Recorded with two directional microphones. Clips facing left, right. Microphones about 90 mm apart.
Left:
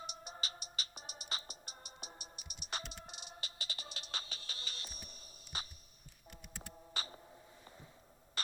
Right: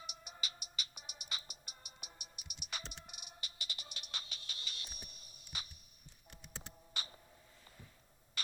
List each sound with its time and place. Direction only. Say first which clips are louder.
0.0 s music: left 3 dB; 35° left (ahead or behind)
6.6 s computer keyboard: left 3 dB; 35° left (ahead or behind)